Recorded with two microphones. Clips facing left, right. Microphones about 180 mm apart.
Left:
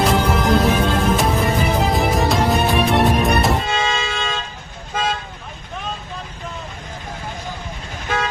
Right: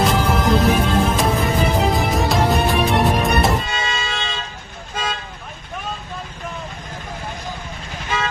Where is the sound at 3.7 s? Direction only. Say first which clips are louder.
Left 4 dB; 50° left (ahead or behind).